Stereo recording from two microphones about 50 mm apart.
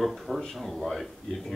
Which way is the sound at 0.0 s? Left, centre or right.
Centre.